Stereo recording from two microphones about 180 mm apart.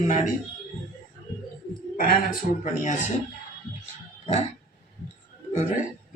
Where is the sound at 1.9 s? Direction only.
55° left (ahead or behind).